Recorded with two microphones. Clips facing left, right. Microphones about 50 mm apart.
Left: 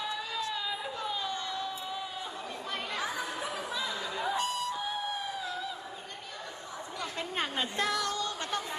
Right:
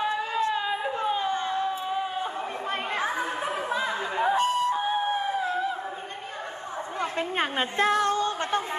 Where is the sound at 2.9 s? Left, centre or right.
Right.